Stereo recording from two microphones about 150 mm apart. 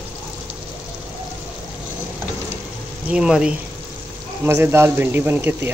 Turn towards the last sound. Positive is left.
turn(degrees=-15)  # may be behind; listen again after turning